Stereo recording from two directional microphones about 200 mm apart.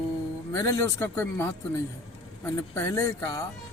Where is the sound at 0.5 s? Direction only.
15° left (ahead or behind).